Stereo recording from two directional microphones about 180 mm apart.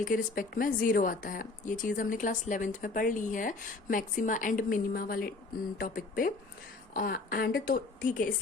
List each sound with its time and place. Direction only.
0.0 s a woman's voice: 50° left (ahead or behind)